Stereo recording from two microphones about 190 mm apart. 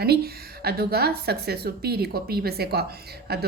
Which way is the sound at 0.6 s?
55° right (ahead or behind).